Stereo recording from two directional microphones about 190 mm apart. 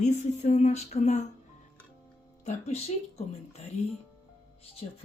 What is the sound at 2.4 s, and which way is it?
Speech, 35° left (ahead or behind).